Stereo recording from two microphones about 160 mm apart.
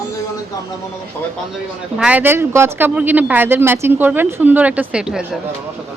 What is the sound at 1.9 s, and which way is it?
Speech, 5° right (ahead or behind).